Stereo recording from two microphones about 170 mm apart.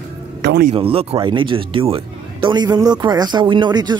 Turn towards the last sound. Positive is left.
turn(degrees=-25)  # may be behind; listen again after turning